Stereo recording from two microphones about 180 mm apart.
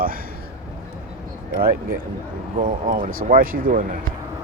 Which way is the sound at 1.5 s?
55° right (ahead or behind).